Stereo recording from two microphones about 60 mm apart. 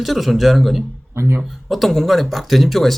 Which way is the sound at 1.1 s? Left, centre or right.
Right.